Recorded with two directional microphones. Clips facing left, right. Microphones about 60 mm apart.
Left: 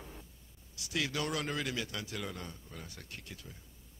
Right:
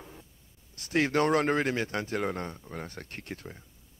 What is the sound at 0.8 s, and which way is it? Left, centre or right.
A man's voice, right.